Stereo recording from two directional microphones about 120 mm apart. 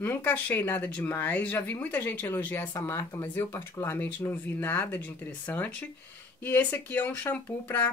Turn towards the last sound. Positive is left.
turn(degrees=15)  # may be behind; listen again after turning